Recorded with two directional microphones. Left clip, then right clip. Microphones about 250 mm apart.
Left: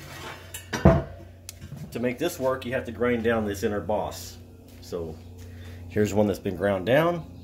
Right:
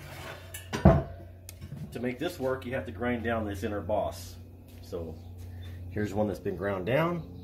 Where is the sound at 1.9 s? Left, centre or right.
Left.